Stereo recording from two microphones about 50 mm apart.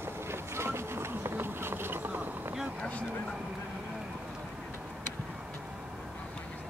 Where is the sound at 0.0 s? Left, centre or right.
Right.